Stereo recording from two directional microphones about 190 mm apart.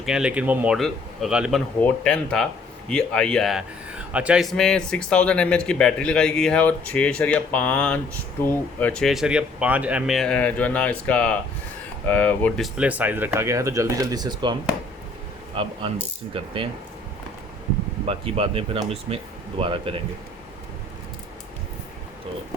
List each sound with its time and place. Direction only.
0.0 s speech: 5° right (ahead or behind); by 14.5 s 20° right (ahead or behind)
15.6 s speech: 25° right (ahead or behind)
18.0 s speech: 30° right (ahead or behind)